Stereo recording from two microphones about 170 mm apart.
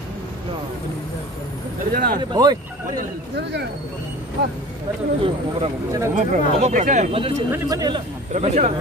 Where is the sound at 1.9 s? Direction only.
60° right (ahead or behind).